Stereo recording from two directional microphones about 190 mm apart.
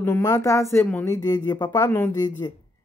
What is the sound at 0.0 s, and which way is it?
Speech, 15° left (ahead or behind).